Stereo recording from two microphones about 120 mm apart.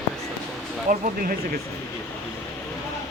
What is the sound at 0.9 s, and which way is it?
Speech, 90° right.